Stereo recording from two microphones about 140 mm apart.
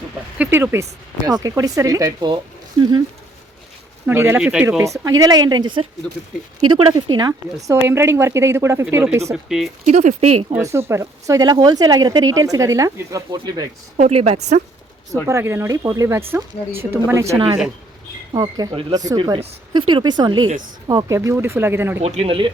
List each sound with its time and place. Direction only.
0.3 s speech: 15° right (ahead or behind)
4.0 s speech: 15° right (ahead or behind)
4.4 s speech: 5° right (ahead or behind)
4.8 s a woman's voice: 25° right (ahead or behind); by 6.9 s 40° right (ahead or behind)
6.9 s speech: 30° right (ahead or behind)
7.9 s speech: 20° right (ahead or behind)
9.3 s speech: centre (ahead or behind)
9.8 s speech: 60° right (ahead or behind)
10.6 s speech: 20° right (ahead or behind)
14.1 s speech: 45° right (ahead or behind)
15.1 s speech: 20° right (ahead or behind)
17.3 s a woman's voice: 35° right (ahead or behind)
21.2 s speech: 20° right (ahead or behind)
22.0 s speech: 50° right (ahead or behind)